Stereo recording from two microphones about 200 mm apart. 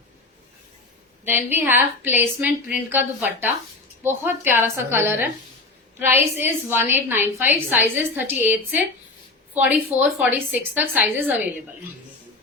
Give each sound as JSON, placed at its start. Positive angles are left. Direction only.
{"t": 1.5, "sound": "a woman's voice", "side_deg": -10}
{"t": 6.4, "sound": "a woman's voice", "side_deg": -10}